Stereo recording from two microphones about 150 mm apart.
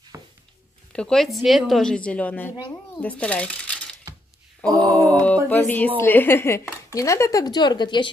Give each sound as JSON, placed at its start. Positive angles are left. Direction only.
{"t": 0.1, "sound": "a sound", "side_deg": -20}
{"t": 0.9, "sound": "a woman's voice", "side_deg": 5}
{"t": 4.6, "sound": "mantra", "side_deg": -25}
{"t": 5.0, "sound": "mantra", "side_deg": 10}
{"t": 5.9, "sound": "speech", "side_deg": 15}